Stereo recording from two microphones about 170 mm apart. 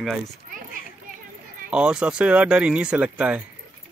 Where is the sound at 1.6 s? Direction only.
5° right (ahead or behind).